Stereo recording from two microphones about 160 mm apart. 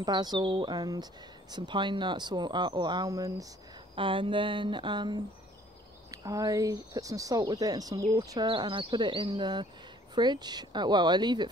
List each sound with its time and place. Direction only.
0.0 s speech: 25° right (ahead or behind)
3.9 s speech: 35° right (ahead or behind)